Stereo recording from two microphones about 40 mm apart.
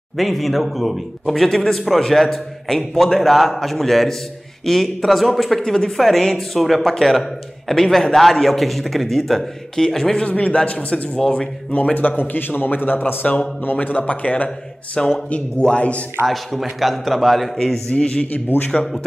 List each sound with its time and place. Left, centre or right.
0.2 s speech: centre
5.6 s a man's voice: centre
10.2 s speech: left
11.1 s a man's voice: centre
11.7 s a man's voice: left
13.7 s speech: left
15.0 s a man's voice: centre
15.6 s a man's voice: left
16.3 s speech: centre
17.8 s a man's voice: left